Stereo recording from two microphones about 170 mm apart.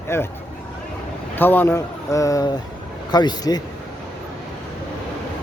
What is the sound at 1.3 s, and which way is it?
Speech, 10° left (ahead or behind).